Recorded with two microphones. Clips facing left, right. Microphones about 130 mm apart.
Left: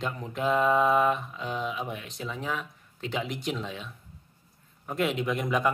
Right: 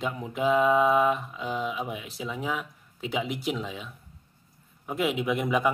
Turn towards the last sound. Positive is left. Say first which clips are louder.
# right 2 dB
turn(degrees=-5)  # may be behind; listen again after turning